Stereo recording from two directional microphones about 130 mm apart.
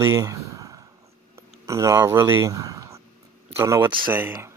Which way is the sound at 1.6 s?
20° right (ahead or behind).